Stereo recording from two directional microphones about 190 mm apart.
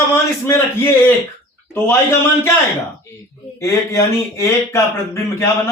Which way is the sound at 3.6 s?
15° left (ahead or behind).